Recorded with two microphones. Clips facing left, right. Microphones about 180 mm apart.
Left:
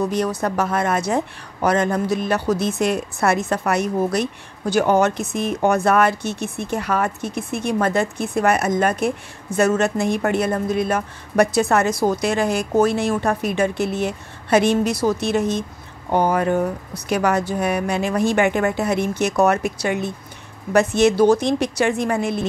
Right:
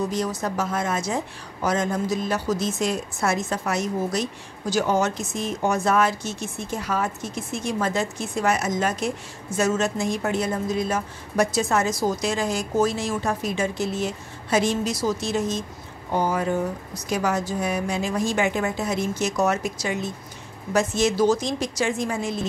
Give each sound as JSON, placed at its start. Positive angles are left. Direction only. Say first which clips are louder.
{"t": 0.1, "sound": "a woman's voice", "louder": "left 5 dB", "side_deg": 60}